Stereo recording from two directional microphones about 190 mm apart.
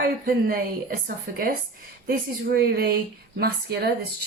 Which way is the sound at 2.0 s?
55° right (ahead or behind).